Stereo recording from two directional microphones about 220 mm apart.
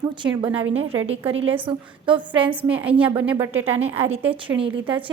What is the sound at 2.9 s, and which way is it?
Speech, 25° right (ahead or behind).